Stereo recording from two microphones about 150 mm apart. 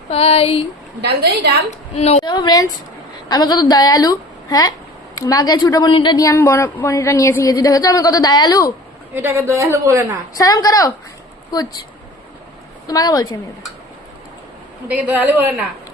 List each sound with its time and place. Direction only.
0.1 s speech: 40° left (ahead or behind)
1.0 s a woman's voice: 90° right
2.0 s a woman's voice: 45° left (ahead or behind)
2.2 s a woman's voice: 30° left (ahead or behind)
9.1 s a man's voice: 15° right (ahead or behind)
10.3 s a woman's voice: 25° left (ahead or behind)
12.9 s a woman's voice: 25° left (ahead or behind)
14.8 s a woman's voice: 10° right (ahead or behind)